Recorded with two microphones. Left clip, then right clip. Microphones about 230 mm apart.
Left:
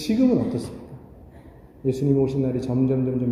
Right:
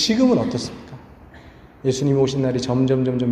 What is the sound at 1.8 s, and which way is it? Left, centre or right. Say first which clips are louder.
A man's voice: right 3 dB; centre.